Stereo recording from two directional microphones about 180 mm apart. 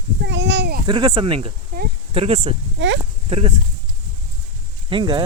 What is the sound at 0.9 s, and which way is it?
Speech, 25° right (ahead or behind).